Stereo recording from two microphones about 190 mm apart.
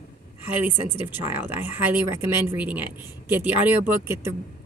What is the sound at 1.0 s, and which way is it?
Speech, 10° right (ahead or behind).